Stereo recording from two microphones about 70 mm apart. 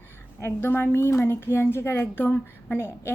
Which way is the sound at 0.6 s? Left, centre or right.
Left.